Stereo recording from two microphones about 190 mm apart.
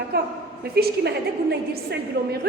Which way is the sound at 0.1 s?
55° right (ahead or behind).